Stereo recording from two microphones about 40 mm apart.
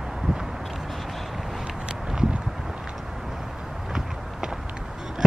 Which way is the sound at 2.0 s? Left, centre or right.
Centre.